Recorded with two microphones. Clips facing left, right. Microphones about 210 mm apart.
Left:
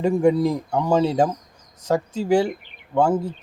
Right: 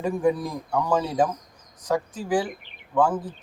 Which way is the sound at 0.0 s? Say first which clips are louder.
Left 6 dB; 25° left (ahead or behind).